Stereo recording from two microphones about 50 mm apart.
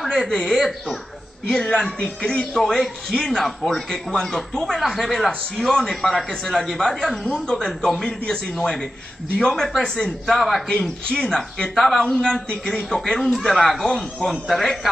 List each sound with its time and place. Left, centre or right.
0.1 s a man's voice: centre
2.5 s a man's voice: centre
12.0 s a man's voice: centre